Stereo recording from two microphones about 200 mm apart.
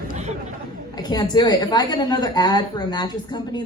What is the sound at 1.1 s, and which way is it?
A woman's voice, 20° left (ahead or behind).